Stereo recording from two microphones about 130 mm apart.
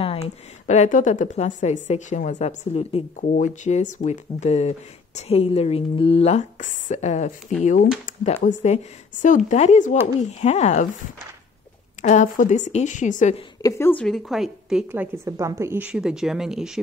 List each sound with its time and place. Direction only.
0.0 s speech: 50° left (ahead or behind)
3.2 s speech: 75° left (ahead or behind); by 6.4 s 50° left (ahead or behind)
6.6 s a woman's voice: 75° left (ahead or behind)
7.6 s a woman's voice: 80° left
8.0 s a woman's voice: 65° left (ahead or behind)
10.4 s speech: 55° left (ahead or behind)
12.0 s a woman's voice: 65° left (ahead or behind)
13.6 s a woman's voice: 20° left (ahead or behind)
14.0 s speech: centre (ahead or behind)
14.9 s speech: 20° right (ahead or behind)
15.9 s speech: 5° right (ahead or behind)